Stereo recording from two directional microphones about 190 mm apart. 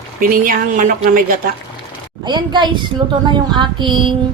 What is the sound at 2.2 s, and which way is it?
Speech, 25° right (ahead or behind).